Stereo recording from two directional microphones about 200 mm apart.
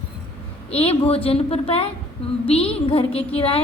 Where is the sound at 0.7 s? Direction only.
30° left (ahead or behind).